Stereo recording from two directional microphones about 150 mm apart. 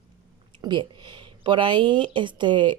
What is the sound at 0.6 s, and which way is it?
Speech, 30° right (ahead or behind).